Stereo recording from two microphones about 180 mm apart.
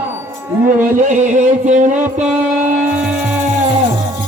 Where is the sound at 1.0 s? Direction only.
45° right (ahead or behind).